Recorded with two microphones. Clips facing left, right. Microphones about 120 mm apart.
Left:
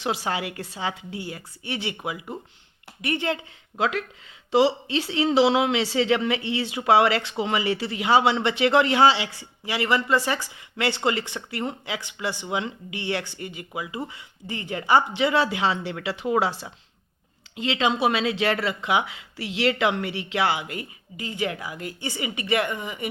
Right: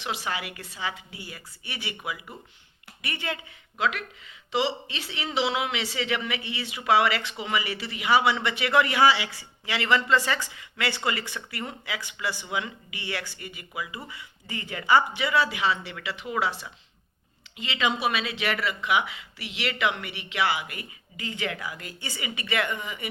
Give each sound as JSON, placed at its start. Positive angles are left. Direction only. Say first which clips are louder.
{"t": 0.0, "sound": "a woman's voice", "louder": "left 5 dB", "side_deg": 35}
{"t": 3.8, "sound": "a woman's voice", "louder": "left 3 dB", "side_deg": 30}
{"t": 9.7, "sound": "a woman's voice", "louder": "left 1 dB", "side_deg": 10}
{"t": 17.7, "sound": "a woman's voice", "louder": "left 3 dB", "side_deg": 30}
{"t": 21.5, "sound": "speech", "louder": "left 3 dB", "side_deg": 20}